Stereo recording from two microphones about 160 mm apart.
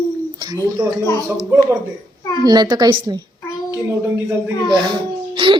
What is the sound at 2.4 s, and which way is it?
Speech, 25° right (ahead or behind).